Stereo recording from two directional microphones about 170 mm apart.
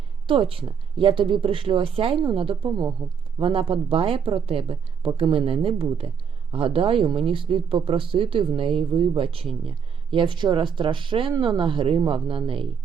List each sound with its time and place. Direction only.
0.3 s speech: 30° right (ahead or behind)